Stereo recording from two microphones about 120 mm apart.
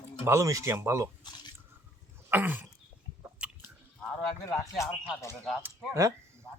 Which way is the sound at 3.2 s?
20° right (ahead or behind).